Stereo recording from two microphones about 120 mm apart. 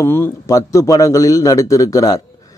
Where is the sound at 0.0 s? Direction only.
20° left (ahead or behind).